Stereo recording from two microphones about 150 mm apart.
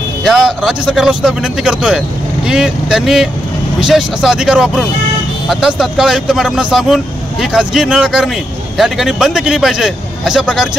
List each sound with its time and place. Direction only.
0.2 s a man's voice: 5° right (ahead or behind)